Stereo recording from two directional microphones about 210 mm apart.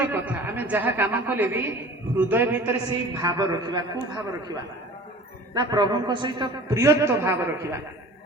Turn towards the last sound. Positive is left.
turn(degrees=-10)  # may be behind; listen again after turning